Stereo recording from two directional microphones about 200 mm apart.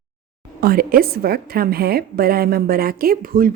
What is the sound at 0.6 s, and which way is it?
Speech, 45° right (ahead or behind).